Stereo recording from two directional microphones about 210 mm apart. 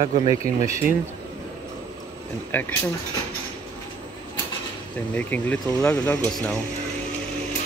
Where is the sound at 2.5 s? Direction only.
10° left (ahead or behind).